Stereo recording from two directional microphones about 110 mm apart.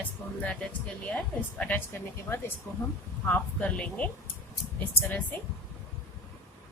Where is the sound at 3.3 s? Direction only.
10° left (ahead or behind).